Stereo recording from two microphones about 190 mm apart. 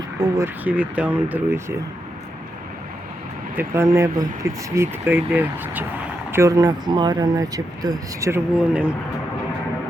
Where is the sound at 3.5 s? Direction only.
15° right (ahead or behind).